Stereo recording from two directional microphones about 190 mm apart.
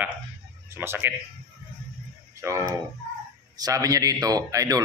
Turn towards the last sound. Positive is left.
turn(degrees=-20)  # may be behind; listen again after turning